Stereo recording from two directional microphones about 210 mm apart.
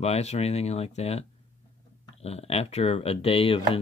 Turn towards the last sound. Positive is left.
turn(degrees=25)  # may be behind; listen again after turning